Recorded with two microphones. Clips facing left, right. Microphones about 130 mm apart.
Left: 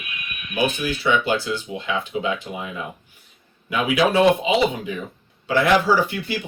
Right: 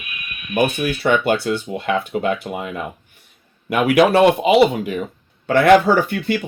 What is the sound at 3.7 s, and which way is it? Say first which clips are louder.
Speech: right 5 dB; 70° right (ahead or behind).